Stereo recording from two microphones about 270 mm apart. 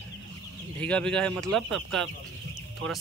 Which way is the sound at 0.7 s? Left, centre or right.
Centre.